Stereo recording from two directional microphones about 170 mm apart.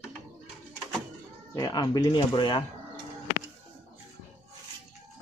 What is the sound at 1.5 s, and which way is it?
Speech, 20° left (ahead or behind).